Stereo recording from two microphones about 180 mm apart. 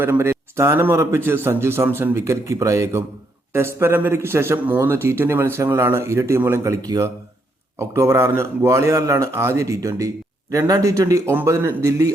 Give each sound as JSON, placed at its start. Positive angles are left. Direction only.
{"t": 0.0, "sound": "speech", "side_deg": -15}